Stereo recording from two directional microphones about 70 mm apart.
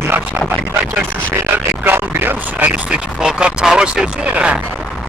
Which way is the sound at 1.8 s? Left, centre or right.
Right.